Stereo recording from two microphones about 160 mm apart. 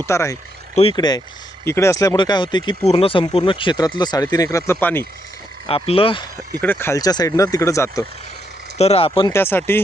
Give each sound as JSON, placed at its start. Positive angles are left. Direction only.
{"t": 0.0, "sound": "speech", "side_deg": 15}
{"t": 5.6, "sound": "speech", "side_deg": 35}
{"t": 6.6, "sound": "speech", "side_deg": 15}
{"t": 8.8, "sound": "speech", "side_deg": 40}
{"t": 9.3, "sound": "speech", "side_deg": 15}